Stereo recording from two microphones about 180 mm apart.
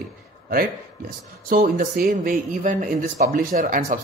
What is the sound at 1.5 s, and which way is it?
Speech, 55° right (ahead or behind).